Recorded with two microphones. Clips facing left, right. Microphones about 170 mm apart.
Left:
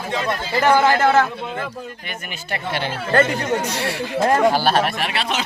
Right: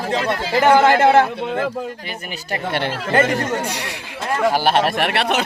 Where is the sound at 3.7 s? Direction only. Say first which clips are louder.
Left 5 dB; 15° right (ahead or behind).